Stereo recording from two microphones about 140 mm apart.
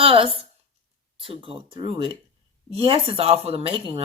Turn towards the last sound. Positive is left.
turn(degrees=-40)  # may be behind; listen again after turning